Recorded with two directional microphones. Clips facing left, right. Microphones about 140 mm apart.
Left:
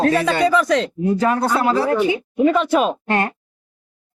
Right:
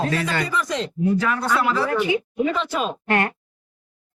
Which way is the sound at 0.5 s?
75° left (ahead or behind).